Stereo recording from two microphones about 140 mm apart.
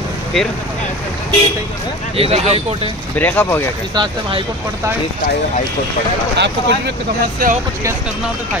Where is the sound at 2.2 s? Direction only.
45° right (ahead or behind).